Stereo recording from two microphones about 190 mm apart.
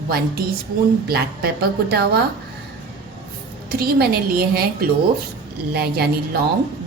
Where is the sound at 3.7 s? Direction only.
55° right (ahead or behind).